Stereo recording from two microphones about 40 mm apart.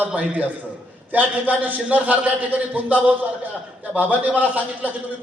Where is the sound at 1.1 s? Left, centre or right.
Right.